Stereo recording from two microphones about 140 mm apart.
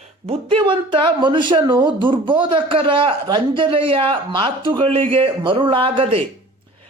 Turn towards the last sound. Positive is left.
turn(degrees=-40)  # may be behind; listen again after turning